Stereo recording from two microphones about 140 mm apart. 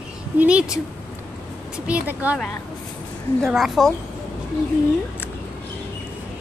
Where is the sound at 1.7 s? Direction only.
10° right (ahead or behind).